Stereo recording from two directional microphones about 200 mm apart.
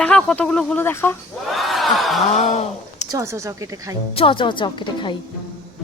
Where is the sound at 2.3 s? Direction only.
35° left (ahead or behind).